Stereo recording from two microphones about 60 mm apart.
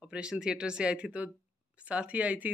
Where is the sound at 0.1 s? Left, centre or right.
Centre.